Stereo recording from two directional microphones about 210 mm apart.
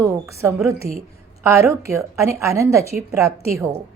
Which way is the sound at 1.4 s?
15° right (ahead or behind).